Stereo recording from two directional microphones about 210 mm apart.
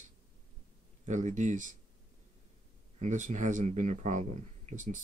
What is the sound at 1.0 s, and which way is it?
Speech, 35° right (ahead or behind).